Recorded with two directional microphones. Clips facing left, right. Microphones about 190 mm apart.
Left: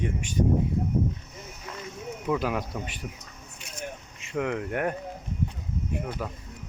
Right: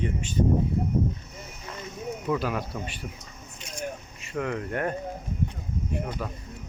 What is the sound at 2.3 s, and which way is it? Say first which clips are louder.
Speech: left 1 dB; 15° left (ahead or behind).